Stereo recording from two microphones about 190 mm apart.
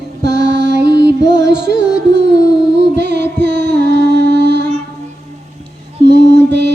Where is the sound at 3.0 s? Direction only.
60° right (ahead or behind).